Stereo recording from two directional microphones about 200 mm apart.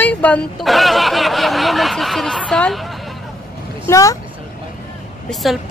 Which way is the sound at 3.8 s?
15° left (ahead or behind).